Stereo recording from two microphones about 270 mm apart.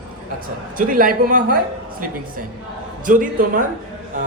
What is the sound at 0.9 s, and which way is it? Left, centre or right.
Speech, right.